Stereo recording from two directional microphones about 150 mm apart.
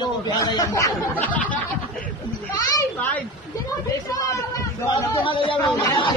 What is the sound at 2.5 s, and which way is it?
Speech, 25° left (ahead or behind).